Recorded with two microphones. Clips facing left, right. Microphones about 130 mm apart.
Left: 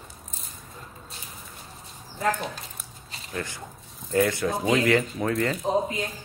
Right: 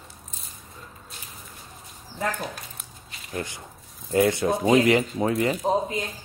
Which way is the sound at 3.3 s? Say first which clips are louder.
Right 1 dB; 20° right (ahead or behind).